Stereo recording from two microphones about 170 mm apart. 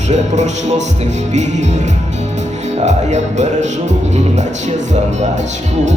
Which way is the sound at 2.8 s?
40° right (ahead or behind).